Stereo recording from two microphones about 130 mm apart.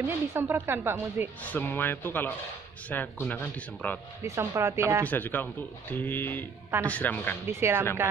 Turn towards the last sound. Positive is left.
turn(degrees=-20)  # may be behind; listen again after turning